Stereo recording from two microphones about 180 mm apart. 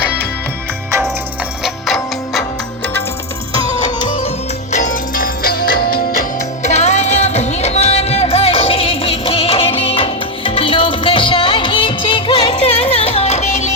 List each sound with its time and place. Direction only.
1.6 s music: centre (ahead or behind)
4.0 s music: 30° left (ahead or behind)
4.7 s music: 45° left (ahead or behind)